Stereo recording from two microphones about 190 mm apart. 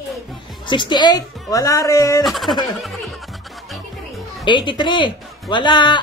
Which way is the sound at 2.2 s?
Centre (ahead or behind).